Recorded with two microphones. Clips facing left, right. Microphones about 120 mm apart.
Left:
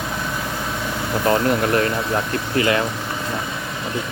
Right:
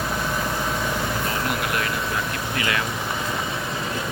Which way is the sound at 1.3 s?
40° left (ahead or behind).